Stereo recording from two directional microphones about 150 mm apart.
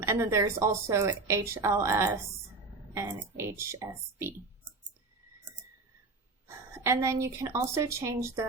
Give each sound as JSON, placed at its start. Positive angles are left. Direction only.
{"t": 0.3, "sound": "a woman's voice", "side_deg": -20}
{"t": 6.8, "sound": "a woman's voice", "side_deg": -20}